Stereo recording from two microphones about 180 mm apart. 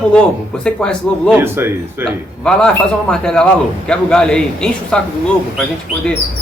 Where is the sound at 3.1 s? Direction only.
5° left (ahead or behind).